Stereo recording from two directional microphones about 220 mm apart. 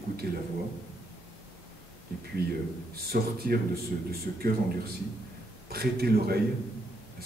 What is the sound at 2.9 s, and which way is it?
A man's voice, 45° right (ahead or behind).